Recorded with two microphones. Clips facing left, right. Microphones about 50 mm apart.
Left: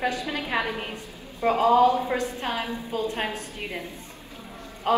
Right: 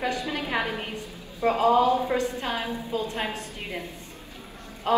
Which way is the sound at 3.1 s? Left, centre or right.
Left.